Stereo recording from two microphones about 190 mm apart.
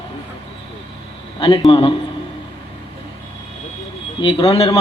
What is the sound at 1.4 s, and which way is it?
Speech, 25° left (ahead or behind).